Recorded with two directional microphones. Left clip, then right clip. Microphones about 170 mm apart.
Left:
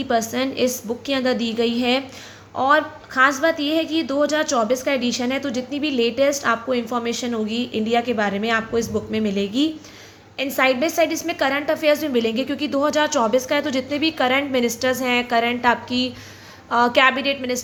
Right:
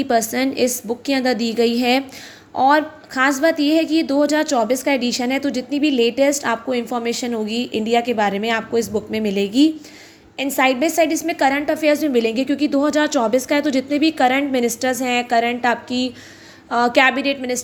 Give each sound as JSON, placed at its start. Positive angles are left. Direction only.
{"t": 0.0, "sound": "a woman's voice", "side_deg": -30}